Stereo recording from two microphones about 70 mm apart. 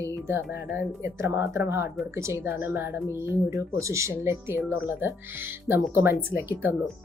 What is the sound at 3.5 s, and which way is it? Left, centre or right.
Speech, right.